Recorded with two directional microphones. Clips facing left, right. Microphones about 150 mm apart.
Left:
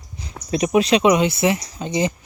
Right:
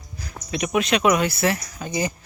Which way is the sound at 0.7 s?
30° left (ahead or behind).